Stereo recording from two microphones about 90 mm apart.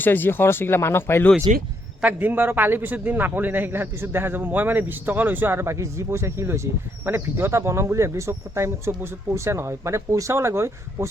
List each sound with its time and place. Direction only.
0.0 s speech: 20° left (ahead or behind)
2.0 s a man's voice: 20° right (ahead or behind)